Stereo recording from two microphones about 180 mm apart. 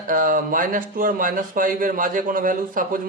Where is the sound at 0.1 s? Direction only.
50° right (ahead or behind).